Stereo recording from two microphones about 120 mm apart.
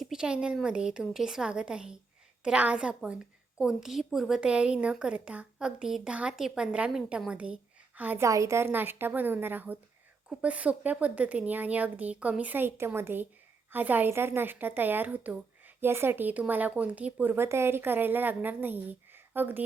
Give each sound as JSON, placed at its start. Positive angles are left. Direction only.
{"t": 0.0, "sound": "a woman's voice", "side_deg": -5}
{"t": 8.2, "sound": "a woman's voice", "side_deg": -25}